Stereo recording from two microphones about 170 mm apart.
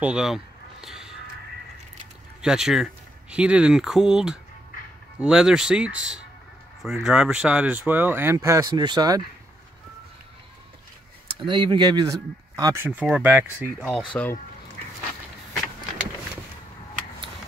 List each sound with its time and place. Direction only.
0.0 s a sound: 5° right (ahead or behind)
2.4 s speech: 5° right (ahead or behind); by 9.2 s 25° right (ahead or behind)
11.4 s speech: 30° right (ahead or behind); by 13.7 s 10° right (ahead or behind)
13.7 s speech: centre (ahead or behind)